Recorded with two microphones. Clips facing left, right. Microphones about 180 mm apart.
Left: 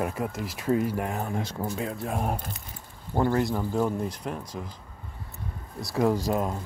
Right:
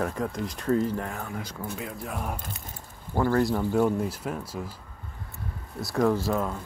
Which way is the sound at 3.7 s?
5° right (ahead or behind).